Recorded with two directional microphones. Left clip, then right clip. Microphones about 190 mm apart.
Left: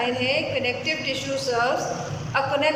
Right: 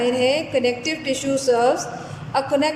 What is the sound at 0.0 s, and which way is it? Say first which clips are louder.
A woman's voice: right 4 dB; 30° right (ahead or behind).